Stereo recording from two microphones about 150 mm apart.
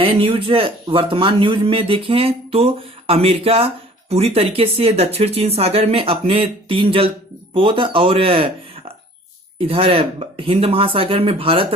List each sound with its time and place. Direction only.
0.0 s speech: 40° right (ahead or behind)